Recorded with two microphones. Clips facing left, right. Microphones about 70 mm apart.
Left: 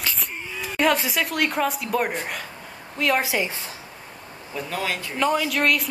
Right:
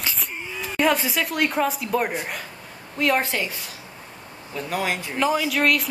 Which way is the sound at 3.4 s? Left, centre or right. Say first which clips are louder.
Left 2 dB; left.